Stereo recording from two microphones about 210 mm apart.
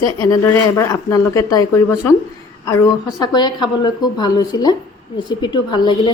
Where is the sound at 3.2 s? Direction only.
20° left (ahead or behind).